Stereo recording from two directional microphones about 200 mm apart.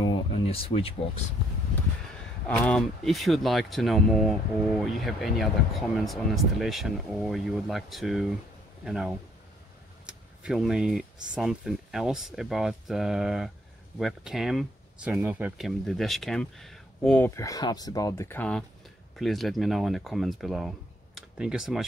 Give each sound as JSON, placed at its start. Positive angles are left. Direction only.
{"t": 0.0, "sound": "a sound", "side_deg": 30}
{"t": 2.4, "sound": "speech", "side_deg": 5}
{"t": 17.4, "sound": "speech", "side_deg": 20}